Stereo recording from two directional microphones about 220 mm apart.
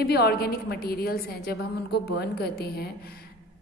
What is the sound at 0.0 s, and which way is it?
A woman's voice, 45° left (ahead or behind).